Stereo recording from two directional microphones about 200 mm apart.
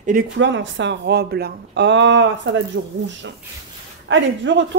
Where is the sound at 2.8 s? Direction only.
90° right.